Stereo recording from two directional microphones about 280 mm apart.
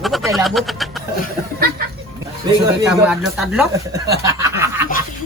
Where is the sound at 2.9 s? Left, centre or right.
Centre.